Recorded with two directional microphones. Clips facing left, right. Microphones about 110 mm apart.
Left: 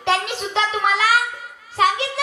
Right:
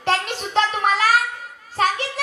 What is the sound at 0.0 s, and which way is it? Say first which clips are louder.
Child singing: left 1 dB; 45° right (ahead or behind).